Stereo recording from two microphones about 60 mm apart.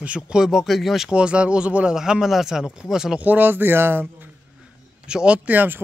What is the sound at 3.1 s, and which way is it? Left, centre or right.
Speech, right.